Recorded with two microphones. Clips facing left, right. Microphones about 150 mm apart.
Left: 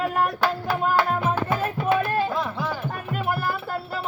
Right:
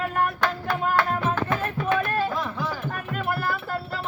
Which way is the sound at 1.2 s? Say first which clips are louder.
Left 1 dB; 10° left (ahead or behind).